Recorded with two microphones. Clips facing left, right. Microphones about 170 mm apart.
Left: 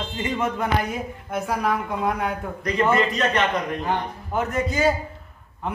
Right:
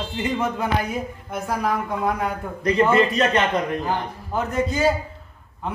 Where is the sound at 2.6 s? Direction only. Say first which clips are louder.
Right 3 dB; 25° right (ahead or behind).